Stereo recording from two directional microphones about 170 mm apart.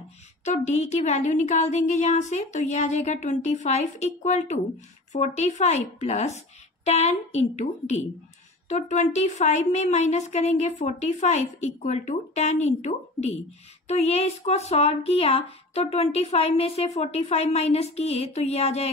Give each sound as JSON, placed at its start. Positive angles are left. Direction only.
{"t": 0.5, "sound": "a woman's voice", "side_deg": 40}